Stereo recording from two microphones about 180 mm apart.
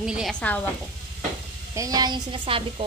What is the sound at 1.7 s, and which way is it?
Speech, 20° right (ahead or behind).